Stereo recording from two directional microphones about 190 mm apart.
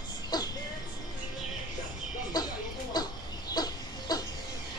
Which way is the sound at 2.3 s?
20° left (ahead or behind).